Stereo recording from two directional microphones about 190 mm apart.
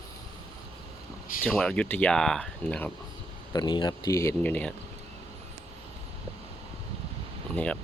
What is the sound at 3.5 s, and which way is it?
Speech, 20° left (ahead or behind).